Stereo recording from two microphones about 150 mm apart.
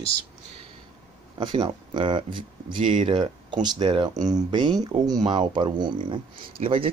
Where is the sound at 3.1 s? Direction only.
35° right (ahead or behind).